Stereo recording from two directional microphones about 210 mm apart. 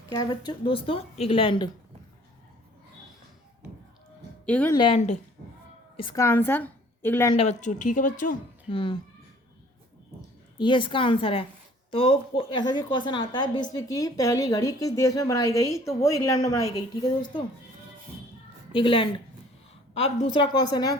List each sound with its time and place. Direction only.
0.1 s speech: 20° left (ahead or behind)
4.4 s speech: 5° left (ahead or behind)
4.7 s a woman's voice: 25° left (ahead or behind)
7.3 s speech: 35° left (ahead or behind)
8.7 s speech: 20° left (ahead or behind)
10.2 s a woman's voice: 20° left (ahead or behind)
18.7 s speech: 25° left (ahead or behind)